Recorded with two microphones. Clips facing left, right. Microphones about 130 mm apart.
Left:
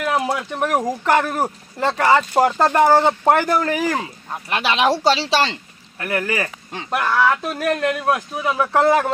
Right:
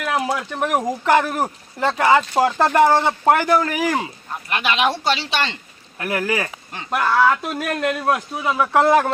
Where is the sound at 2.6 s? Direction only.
30° left (ahead or behind).